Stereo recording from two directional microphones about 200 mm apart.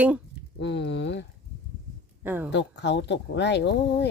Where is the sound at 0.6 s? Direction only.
60° left (ahead or behind).